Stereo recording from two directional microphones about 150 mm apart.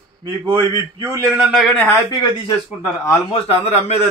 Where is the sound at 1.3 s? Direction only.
5° right (ahead or behind).